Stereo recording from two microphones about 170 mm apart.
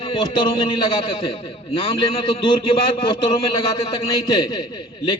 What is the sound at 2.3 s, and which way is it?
A man's voice, 30° left (ahead or behind).